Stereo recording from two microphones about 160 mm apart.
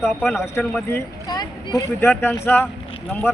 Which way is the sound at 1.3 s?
25° left (ahead or behind).